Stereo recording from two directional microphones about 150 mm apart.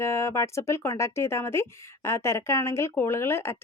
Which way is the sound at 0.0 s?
20° left (ahead or behind).